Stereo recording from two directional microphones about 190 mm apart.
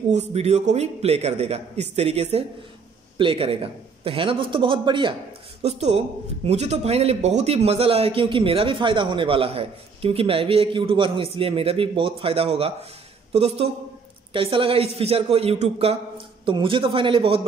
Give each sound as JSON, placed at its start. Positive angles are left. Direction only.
{"t": 0.1, "sound": "a man's voice", "side_deg": -35}